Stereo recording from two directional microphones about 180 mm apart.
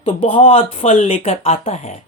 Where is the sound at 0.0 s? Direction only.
35° left (ahead or behind).